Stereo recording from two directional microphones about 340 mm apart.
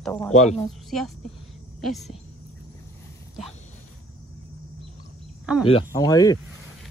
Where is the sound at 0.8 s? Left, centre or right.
Centre.